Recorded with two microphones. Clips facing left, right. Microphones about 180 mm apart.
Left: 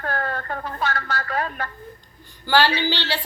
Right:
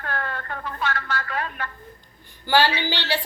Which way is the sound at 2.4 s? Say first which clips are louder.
Left 1 dB; 15° right (ahead or behind).